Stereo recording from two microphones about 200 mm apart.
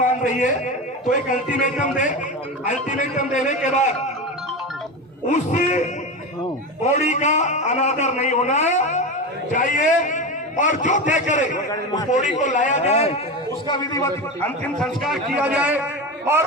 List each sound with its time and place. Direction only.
0.0 s a sound: 40° left (ahead or behind)
1.3 s a man's voice: 40° left (ahead or behind)
5.3 s a man's voice: 35° left (ahead or behind)
13.7 s a man's voice: 15° left (ahead or behind)
14.8 s a man's voice: centre (ahead or behind)